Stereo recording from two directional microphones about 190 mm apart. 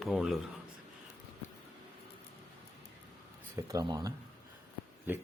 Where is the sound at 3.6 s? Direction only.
20° right (ahead or behind).